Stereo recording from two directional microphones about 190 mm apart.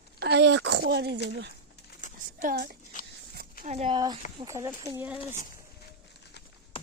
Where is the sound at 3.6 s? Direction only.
35° right (ahead or behind).